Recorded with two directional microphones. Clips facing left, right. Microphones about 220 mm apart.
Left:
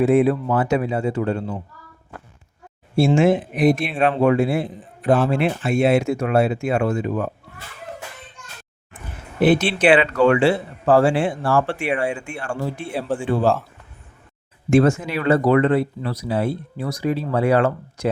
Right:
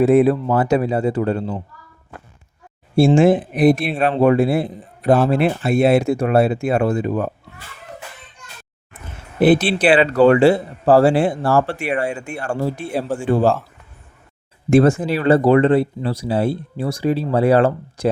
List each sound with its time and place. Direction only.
0.0 s speech: 40° right (ahead or behind)
3.2 s speech: 35° right (ahead or behind)
9.4 s speech: 35° right (ahead or behind)
14.7 s speech: 35° right (ahead or behind)